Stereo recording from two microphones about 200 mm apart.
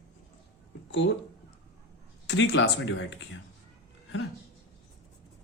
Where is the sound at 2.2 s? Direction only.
60° left (ahead or behind).